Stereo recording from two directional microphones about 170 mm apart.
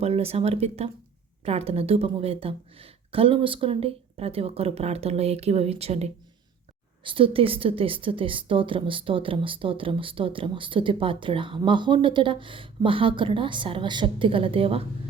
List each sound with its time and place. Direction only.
0.0 s a woman's voice: 35° right (ahead or behind)